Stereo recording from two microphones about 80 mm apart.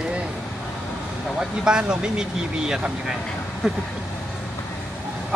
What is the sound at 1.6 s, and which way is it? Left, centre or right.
Speech, centre.